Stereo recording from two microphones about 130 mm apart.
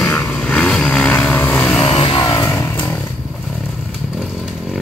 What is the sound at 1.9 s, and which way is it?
Vehicle, 40° left (ahead or behind).